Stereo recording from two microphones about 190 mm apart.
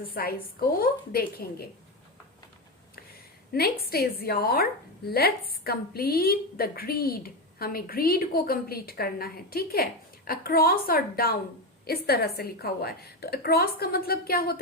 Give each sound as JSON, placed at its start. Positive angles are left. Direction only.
{"t": 0.1, "sound": "a woman's voice", "side_deg": 50}
{"t": 3.5, "sound": "a woman's voice", "side_deg": 55}